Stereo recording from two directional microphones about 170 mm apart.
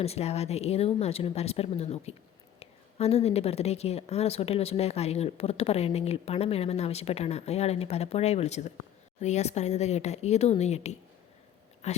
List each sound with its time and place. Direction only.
0.0 s a woman's voice: 40° left (ahead or behind)